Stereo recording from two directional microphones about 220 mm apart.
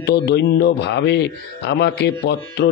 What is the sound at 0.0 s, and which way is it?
Speech, 50° left (ahead or behind).